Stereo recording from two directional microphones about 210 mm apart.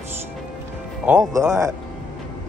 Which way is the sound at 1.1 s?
15° right (ahead or behind).